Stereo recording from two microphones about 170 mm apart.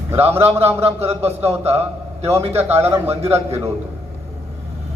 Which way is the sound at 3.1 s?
35° right (ahead or behind).